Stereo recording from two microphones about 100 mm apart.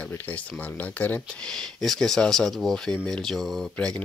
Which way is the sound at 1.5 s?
5° left (ahead or behind).